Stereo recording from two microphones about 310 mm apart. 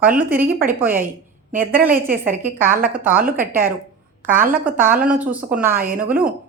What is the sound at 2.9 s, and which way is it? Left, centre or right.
Speech, centre.